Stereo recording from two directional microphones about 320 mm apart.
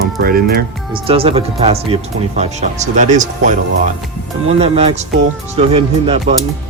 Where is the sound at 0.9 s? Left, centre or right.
Centre.